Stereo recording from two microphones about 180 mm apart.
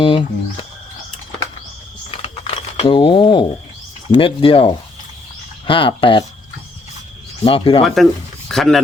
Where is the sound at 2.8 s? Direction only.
30° left (ahead or behind).